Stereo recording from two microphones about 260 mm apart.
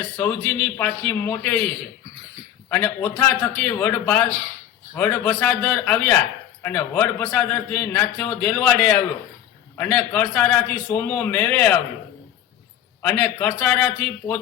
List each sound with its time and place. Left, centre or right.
0.2 s speech: centre
13.0 s a man's voice: centre